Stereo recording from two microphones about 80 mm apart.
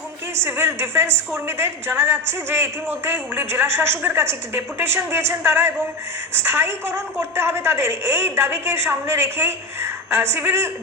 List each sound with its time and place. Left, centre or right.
0.3 s a woman's voice: right